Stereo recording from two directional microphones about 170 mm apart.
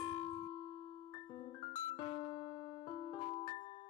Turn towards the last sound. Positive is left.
turn(degrees=30)  # may be behind; listen again after turning